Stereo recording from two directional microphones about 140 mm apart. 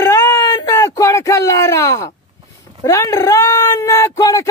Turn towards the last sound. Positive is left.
turn(degrees=25)  # may be behind; listen again after turning